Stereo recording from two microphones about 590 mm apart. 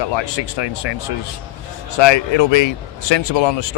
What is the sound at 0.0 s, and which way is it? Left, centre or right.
Speech, left.